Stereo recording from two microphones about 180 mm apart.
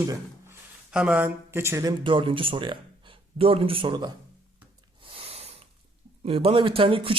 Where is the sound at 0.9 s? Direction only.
5° right (ahead or behind); by 4.1 s 25° right (ahead or behind).